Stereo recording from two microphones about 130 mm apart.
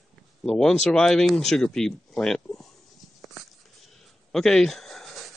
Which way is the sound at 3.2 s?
Centre (ahead or behind).